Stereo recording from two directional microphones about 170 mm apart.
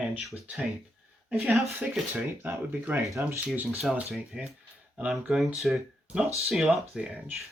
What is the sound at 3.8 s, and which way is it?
Speech, 5° right (ahead or behind).